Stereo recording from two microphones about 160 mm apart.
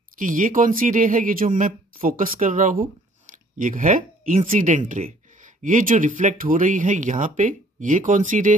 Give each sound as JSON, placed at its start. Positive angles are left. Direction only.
{"t": 0.2, "sound": "speech", "side_deg": -55}